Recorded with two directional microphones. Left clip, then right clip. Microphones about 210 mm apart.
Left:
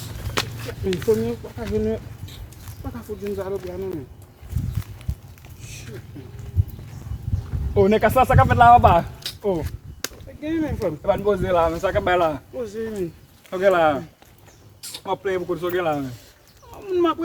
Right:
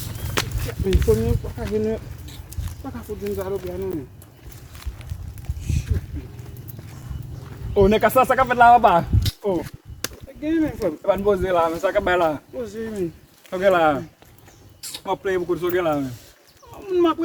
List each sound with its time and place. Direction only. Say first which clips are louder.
0.2 s a sound: even; centre (ahead or behind)
2.8 s speech: right 1 dB; centre (ahead or behind)
7.7 s speech: right 1 dB; 20° right (ahead or behind)
9.6 s whip: right 1 dB; 10° left (ahead or behind)
11.0 s speech: right 1 dB; 5° right (ahead or behind)
12.5 s speech: even; 10° left (ahead or behind)
13.5 s speech: even; 15° right (ahead or behind)
14.8 s a sound: right 1 dB; centre (ahead or behind)
15.0 s speech: right 1 dB; 20° right (ahead or behind)
16.7 s speech: right 1 dB; 15° left (ahead or behind)